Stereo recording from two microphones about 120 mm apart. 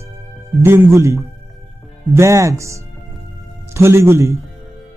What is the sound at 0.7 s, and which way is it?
Speech, 20° right (ahead or behind).